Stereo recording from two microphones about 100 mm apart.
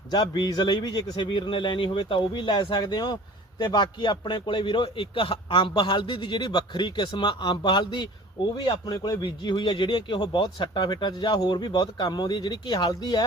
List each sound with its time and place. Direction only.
0.1 s speech: 45° left (ahead or behind)